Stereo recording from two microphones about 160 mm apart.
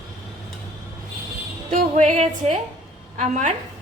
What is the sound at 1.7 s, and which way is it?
A woman's voice, 50° right (ahead or behind).